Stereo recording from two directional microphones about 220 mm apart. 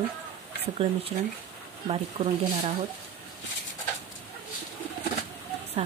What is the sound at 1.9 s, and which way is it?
Speech, 30° right (ahead or behind).